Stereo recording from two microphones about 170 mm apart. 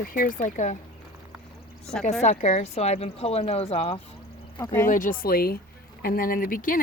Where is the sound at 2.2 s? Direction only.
40° left (ahead or behind).